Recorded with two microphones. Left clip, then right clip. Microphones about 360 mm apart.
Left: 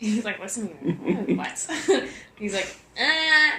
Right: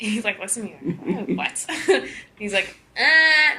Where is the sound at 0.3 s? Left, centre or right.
Right.